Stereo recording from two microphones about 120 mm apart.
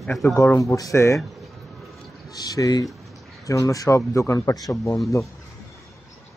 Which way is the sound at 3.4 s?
25° left (ahead or behind).